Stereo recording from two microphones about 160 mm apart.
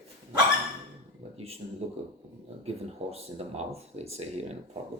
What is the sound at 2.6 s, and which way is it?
Speech, 40° right (ahead or behind).